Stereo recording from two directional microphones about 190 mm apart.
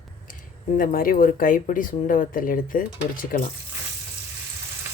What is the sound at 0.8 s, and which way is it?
Speech, 50° left (ahead or behind).